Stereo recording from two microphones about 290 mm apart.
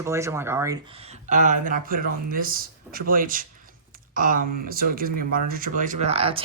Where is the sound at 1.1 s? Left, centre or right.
Right.